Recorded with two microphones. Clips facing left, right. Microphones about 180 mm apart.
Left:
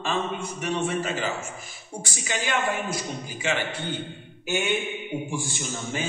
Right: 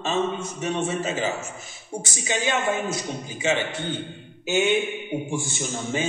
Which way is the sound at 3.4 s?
25° right (ahead or behind).